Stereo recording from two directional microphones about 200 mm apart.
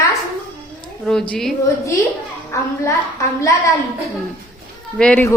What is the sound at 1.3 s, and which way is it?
Speech, centre (ahead or behind).